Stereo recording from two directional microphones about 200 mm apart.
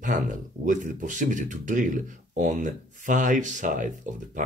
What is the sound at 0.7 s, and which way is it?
Speech, 40° right (ahead or behind).